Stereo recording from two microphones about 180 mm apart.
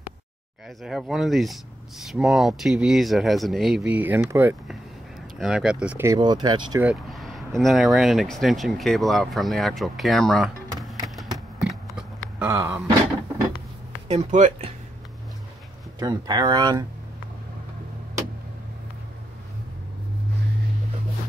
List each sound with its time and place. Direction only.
0.8 s speech: centre (ahead or behind)
6.1 s speech: 25° right (ahead or behind)
6.8 s speech: 5° right (ahead or behind)
11.1 s a sound: centre (ahead or behind)
12.4 s speech: 15° right (ahead or behind)
14.0 s speech: 40° right (ahead or behind)
16.0 s speech: 20° right (ahead or behind)